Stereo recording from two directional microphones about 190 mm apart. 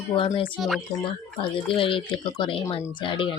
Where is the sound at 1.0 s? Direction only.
25° left (ahead or behind).